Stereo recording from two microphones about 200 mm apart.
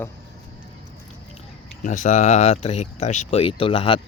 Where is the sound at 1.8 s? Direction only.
40° left (ahead or behind).